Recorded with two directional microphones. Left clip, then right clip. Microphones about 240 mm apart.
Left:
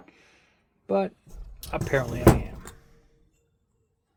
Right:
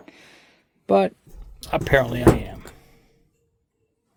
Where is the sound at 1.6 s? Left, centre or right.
Right.